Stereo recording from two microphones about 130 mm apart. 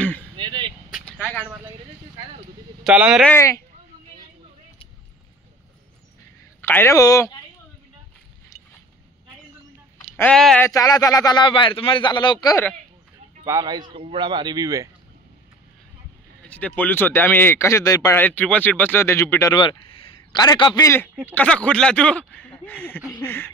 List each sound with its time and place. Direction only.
0.4 s a sound: 40° right (ahead or behind)
2.8 s speech: 5° right (ahead or behind)
3.3 s a man's voice: 20° left (ahead or behind)
6.6 s a man's voice: 20° left (ahead or behind)
10.3 s speech: 5° left (ahead or behind)
10.6 s speech: 30° left (ahead or behind)
13.5 s speech: 30° right (ahead or behind)
16.4 s speech: 10° left (ahead or behind); by 18.1 s 25° left (ahead or behind)
18.1 s speech: 10° left (ahead or behind)
19.5 s a sound: 35° left (ahead or behind)
20.3 s speech: 35° left (ahead or behind)
20.8 s a man's voice: 20° left (ahead or behind)